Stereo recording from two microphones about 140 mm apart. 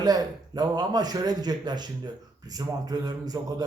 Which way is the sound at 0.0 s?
30° right (ahead or behind).